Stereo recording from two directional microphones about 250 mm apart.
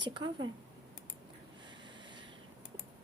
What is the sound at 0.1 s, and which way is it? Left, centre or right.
Speech, centre.